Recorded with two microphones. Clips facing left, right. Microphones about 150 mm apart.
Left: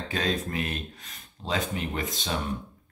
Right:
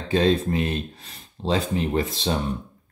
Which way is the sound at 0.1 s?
30° right (ahead or behind).